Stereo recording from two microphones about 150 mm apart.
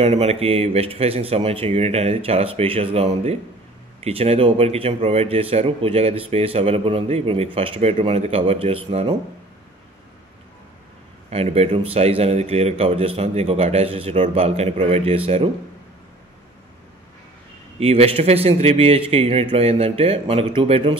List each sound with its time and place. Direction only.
0.0 s speech: 45° right (ahead or behind)
11.2 s speech: 45° right (ahead or behind)
17.7 s speech: 45° right (ahead or behind)